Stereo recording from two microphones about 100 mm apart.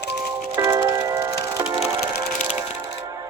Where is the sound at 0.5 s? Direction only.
30° right (ahead or behind).